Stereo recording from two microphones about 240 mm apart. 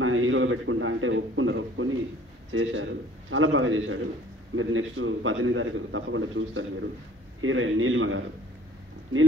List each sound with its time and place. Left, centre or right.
0.0 s a man's voice: right